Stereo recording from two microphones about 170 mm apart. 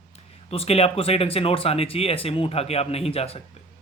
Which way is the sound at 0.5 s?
35° left (ahead or behind).